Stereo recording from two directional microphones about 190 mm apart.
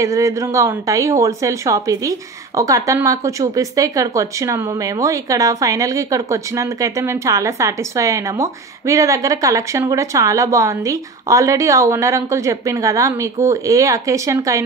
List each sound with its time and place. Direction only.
0.0 s speech: 15° right (ahead or behind)